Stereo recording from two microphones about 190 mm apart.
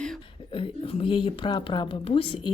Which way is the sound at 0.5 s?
30° left (ahead or behind).